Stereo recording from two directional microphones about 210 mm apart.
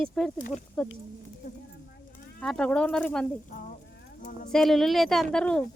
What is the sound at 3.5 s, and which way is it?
Clip-clop, 40° left (ahead or behind).